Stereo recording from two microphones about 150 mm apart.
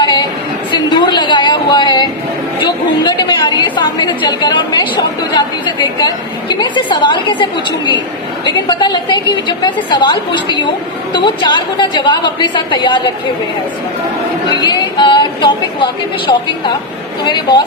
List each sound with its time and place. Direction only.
0.0 s a sound: 30° left (ahead or behind)
2.6 s chatter: 30° left (ahead or behind)
8.4 s a woman's voice: 30° left (ahead or behind)
14.6 s a woman's voice: 30° left (ahead or behind)